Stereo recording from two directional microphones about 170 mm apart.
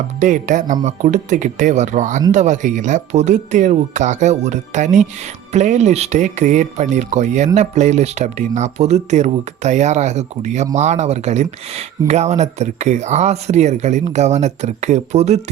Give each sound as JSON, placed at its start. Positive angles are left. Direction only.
{"t": 0.2, "sound": "speech", "side_deg": -45}